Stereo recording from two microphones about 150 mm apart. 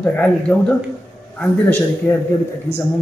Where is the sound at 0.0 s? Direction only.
10° left (ahead or behind).